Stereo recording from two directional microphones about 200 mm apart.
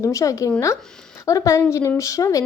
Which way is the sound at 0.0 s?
15° left (ahead or behind).